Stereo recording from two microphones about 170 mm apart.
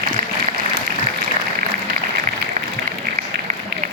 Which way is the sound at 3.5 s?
50° right (ahead or behind).